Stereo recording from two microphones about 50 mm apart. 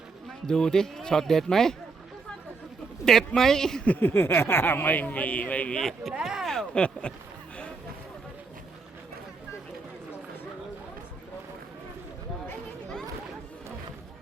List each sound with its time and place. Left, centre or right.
0.4 s speech: centre
3.1 s speech: centre
4.1 s speech: left
6.1 s speech: centre
6.4 s a sound: centre
7.0 s speech: left